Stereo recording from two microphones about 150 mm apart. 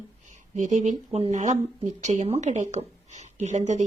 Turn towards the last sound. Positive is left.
turn(degrees=-50)  # may be behind; listen again after turning